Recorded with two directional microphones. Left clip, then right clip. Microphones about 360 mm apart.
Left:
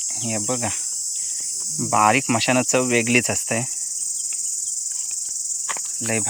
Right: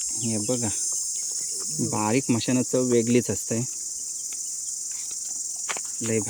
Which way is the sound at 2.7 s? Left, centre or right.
Centre.